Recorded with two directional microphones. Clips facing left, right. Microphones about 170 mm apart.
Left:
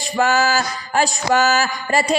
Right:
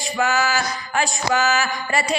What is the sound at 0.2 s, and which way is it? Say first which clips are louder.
Speech: left 4 dB; 35° left (ahead or behind).